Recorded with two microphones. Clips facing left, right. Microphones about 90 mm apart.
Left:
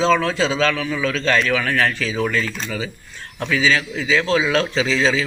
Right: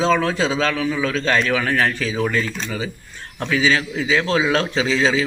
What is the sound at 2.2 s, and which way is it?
Speech, 10° right (ahead or behind).